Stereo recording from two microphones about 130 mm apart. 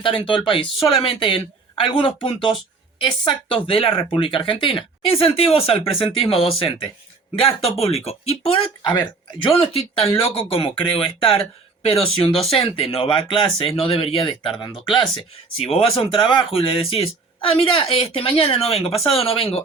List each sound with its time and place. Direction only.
0.0 s speech: 40° left (ahead or behind)
8.8 s speech: 30° left (ahead or behind)
9.5 s speech: 45° left (ahead or behind)